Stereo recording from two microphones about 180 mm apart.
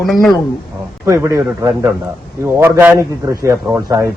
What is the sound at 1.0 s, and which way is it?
A man's voice, 15° right (ahead or behind).